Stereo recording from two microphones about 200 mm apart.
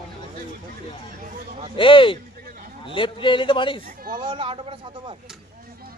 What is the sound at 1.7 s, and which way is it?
A man's voice, 25° left (ahead or behind).